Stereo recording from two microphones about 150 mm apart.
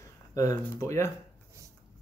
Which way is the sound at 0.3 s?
20° left (ahead or behind).